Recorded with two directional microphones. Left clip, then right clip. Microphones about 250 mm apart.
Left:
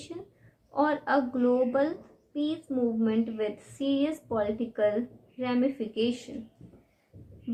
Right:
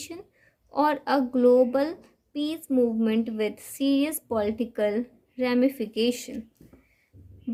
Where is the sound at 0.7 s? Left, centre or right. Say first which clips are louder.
Right 2 dB; right.